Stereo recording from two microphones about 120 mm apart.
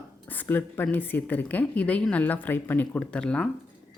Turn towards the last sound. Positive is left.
turn(degrees=10)  # may be behind; listen again after turning